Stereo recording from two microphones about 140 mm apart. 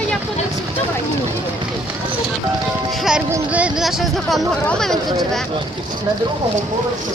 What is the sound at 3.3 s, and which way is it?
Speech, 10° right (ahead or behind).